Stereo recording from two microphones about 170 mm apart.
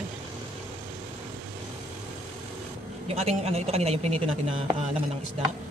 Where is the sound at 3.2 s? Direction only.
40° right (ahead or behind).